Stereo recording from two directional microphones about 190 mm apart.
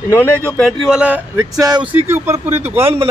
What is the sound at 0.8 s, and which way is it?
A man's voice, 5° right (ahead or behind).